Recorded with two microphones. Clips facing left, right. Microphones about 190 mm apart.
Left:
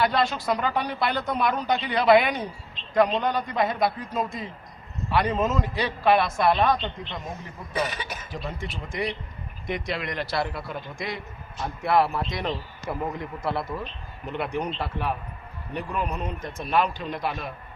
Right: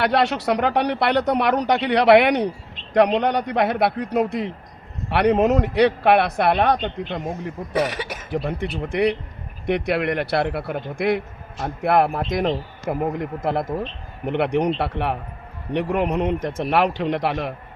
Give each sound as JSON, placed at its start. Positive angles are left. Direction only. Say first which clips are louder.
{"t": 0.0, "sound": "speech", "louder": "right 4 dB", "side_deg": -70}
{"t": 8.4, "sound": "speech", "louder": "right 8 dB", "side_deg": -60}
{"t": 14.3, "sound": "a man's voice", "louder": "right 9 dB", "side_deg": -65}